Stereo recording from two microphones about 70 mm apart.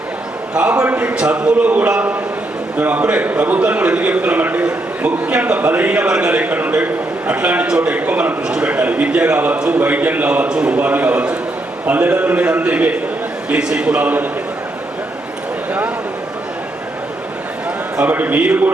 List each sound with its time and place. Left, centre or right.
0.5 s a man's voice: right
18.0 s a man's voice: right